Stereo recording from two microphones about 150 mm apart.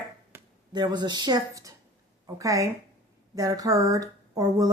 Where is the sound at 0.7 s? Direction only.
30° right (ahead or behind).